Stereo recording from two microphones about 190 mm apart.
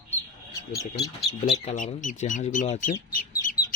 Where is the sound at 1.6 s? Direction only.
40° left (ahead or behind).